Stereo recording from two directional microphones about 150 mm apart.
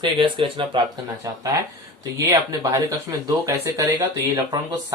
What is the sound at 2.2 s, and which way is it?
Speech, 20° right (ahead or behind).